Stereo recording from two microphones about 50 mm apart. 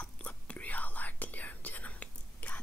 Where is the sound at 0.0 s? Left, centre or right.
Left.